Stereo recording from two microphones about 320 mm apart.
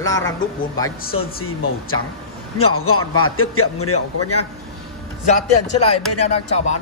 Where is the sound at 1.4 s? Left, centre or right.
Left.